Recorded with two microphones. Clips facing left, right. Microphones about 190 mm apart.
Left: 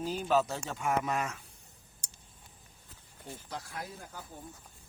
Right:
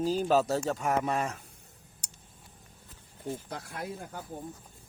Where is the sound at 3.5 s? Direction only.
55° right (ahead or behind).